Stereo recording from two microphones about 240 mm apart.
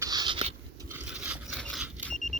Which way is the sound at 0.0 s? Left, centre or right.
Centre.